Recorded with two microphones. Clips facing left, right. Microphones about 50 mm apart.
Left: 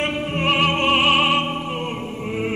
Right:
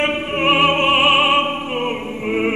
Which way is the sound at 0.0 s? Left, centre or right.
Right.